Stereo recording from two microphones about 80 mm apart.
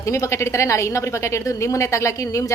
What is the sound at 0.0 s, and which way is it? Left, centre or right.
A woman's voice, left.